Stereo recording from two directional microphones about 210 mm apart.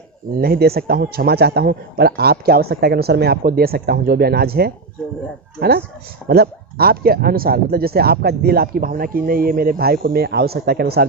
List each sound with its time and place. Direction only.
0.3 s speech: 45° right (ahead or behind)